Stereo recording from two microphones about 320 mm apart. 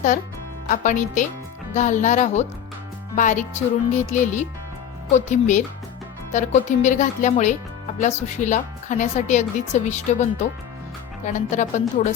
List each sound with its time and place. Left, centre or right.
0.7 s speech: left